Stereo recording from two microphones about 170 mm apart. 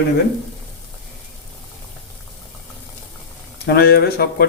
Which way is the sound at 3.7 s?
65° left (ahead or behind).